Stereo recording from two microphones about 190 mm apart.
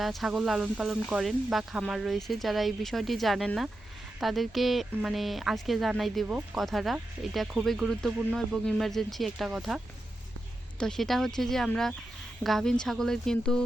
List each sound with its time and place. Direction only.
0.0 s a woman's voice: centre (ahead or behind)